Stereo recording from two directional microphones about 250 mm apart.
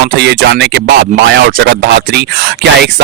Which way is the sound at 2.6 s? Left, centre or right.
Right.